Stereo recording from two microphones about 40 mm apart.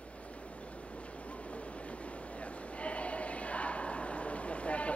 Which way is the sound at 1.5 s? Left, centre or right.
Left.